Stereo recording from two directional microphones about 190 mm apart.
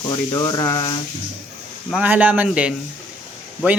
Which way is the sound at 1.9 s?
10° right (ahead or behind).